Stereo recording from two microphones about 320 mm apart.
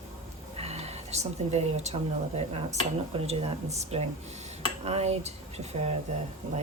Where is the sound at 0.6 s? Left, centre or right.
Centre.